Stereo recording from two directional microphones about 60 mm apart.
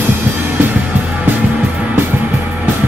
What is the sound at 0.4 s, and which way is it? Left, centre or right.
Music, right.